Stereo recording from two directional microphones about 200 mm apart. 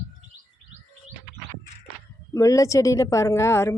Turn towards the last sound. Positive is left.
turn(degrees=15)  # may be behind; listen again after turning